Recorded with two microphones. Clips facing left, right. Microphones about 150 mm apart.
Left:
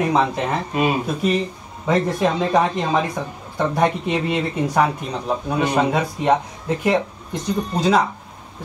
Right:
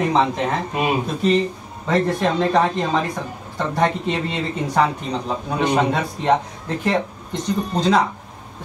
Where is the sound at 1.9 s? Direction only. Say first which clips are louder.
Even; 10° left (ahead or behind).